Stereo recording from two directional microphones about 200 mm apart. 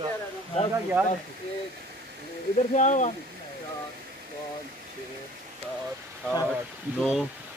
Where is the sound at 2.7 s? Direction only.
35° left (ahead or behind).